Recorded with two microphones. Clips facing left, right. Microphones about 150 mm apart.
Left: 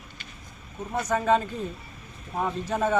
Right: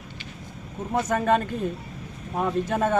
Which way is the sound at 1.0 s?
55° right (ahead or behind).